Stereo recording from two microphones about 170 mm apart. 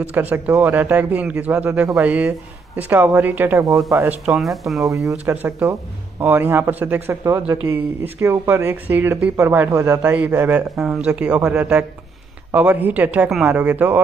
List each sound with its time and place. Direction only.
0.0 s speech: 10° right (ahead or behind)
4.3 s speech: centre (ahead or behind)
4.8 s speech: 20° right (ahead or behind)